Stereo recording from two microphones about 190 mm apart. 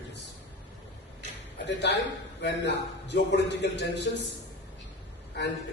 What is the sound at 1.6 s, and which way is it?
A man's voice, 65° left (ahead or behind).